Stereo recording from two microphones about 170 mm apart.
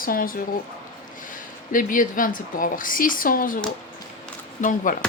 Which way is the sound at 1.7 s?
50° left (ahead or behind).